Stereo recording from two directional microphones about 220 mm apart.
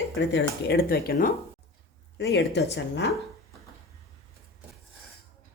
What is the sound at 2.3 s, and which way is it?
Speech, 50° left (ahead or behind).